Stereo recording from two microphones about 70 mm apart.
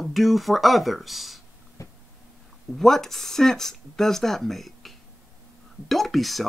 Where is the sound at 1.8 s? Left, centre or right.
Left.